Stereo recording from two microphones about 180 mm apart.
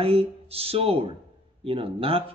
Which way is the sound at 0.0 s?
35° right (ahead or behind).